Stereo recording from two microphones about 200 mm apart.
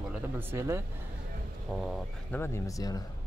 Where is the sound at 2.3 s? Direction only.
15° left (ahead or behind).